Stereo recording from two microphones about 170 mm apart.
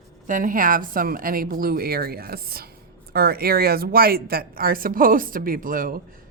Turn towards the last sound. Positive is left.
turn(degrees=-55)  # may be behind; listen again after turning